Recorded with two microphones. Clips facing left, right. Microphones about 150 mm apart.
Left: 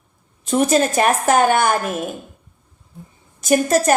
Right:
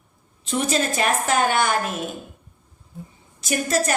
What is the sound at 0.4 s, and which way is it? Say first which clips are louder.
A man's voice: left 7 dB; 45° left (ahead or behind).